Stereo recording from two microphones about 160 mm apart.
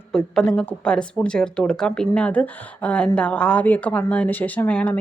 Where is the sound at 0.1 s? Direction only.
5° left (ahead or behind).